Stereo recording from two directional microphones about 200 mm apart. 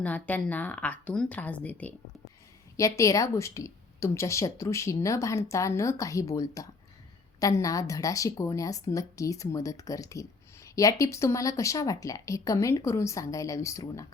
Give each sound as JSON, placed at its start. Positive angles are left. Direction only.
{"t": 0.0, "sound": "a woman's voice", "side_deg": 5}
{"t": 3.0, "sound": "a woman's voice", "side_deg": 15}